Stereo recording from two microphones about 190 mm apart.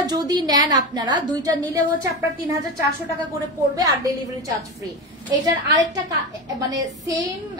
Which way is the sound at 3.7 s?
20° right (ahead or behind).